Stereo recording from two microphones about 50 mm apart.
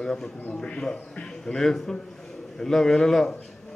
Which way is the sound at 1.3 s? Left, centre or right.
Centre.